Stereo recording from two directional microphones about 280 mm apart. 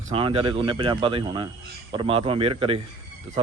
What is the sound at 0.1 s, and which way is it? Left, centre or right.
A man's voice, centre.